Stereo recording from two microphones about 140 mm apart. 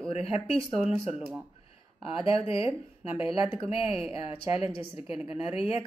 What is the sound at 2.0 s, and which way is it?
Speech, 40° left (ahead or behind).